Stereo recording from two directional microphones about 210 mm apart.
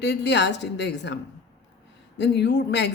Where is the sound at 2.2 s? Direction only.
55° left (ahead or behind).